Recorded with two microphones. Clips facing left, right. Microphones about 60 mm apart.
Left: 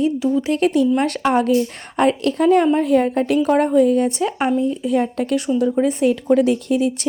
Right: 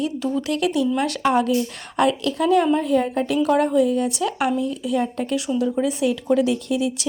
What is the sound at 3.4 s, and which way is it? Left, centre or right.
Speech, left.